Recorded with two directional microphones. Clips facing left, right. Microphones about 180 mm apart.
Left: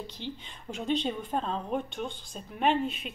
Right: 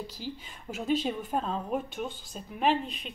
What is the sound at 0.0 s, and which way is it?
A woman's voice, 5° right (ahead or behind).